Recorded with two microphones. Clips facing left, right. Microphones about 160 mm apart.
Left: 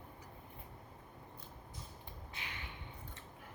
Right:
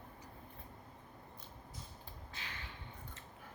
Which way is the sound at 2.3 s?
20° left (ahead or behind).